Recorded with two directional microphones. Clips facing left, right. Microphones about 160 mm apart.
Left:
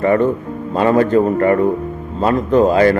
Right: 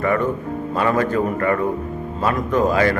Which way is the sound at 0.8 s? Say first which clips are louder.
Left 7 dB; 35° left (ahead or behind).